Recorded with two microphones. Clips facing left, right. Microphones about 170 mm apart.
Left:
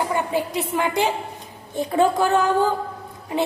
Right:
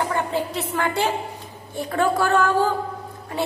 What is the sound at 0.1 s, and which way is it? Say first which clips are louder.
A woman's voice: left 1 dB; 15° left (ahead or behind).